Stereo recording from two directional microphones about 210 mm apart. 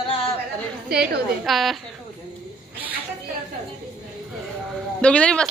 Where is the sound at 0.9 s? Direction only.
Centre (ahead or behind).